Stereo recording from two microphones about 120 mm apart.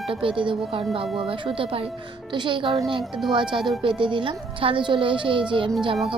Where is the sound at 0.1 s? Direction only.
45° right (ahead or behind).